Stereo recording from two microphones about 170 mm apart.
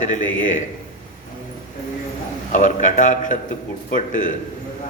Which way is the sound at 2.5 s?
50° left (ahead or behind).